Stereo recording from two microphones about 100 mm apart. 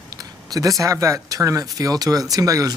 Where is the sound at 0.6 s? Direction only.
35° right (ahead or behind).